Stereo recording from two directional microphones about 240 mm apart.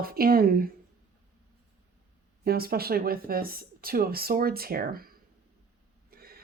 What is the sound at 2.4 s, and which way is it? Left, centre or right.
Speech, right.